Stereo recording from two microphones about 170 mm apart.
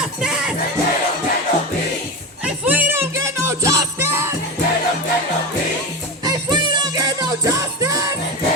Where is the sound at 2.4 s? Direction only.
10° right (ahead or behind).